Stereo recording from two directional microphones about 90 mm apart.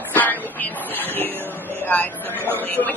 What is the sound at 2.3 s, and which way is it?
Speech, 25° right (ahead or behind).